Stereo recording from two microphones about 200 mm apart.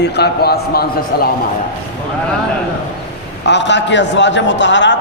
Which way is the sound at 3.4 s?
60° left (ahead or behind).